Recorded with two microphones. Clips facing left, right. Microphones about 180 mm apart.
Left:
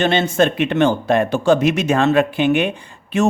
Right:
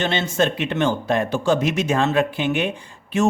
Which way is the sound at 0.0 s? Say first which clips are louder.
Left 5 dB; 55° left (ahead or behind).